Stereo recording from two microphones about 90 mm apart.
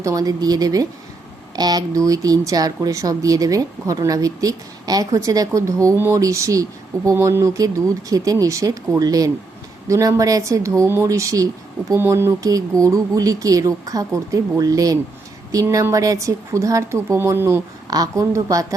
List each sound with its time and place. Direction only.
0.0 s speech: 40° right (ahead or behind)
11.9 s speech: 30° right (ahead or behind)
17.9 s speech: 40° right (ahead or behind)